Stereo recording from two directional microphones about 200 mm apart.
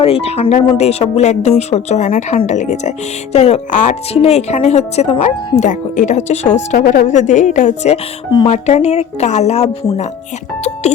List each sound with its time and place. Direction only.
0.0 s speech: 30° left (ahead or behind)